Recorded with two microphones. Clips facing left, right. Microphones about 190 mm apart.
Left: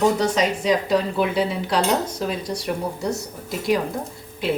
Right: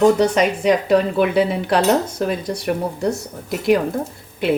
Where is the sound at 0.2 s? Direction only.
60° right (ahead or behind).